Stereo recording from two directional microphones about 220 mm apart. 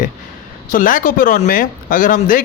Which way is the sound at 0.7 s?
40° left (ahead or behind).